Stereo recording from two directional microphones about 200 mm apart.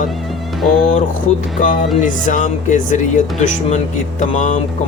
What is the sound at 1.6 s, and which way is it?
Speech, 40° left (ahead or behind).